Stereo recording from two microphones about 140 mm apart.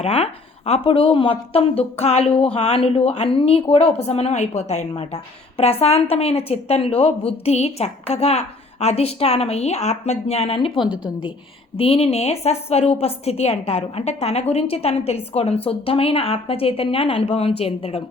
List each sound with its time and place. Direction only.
0.0 s a woman's voice: 45° left (ahead or behind)
10.8 s a woman's voice: 5° right (ahead or behind)
11.8 s a woman's voice: 45° left (ahead or behind)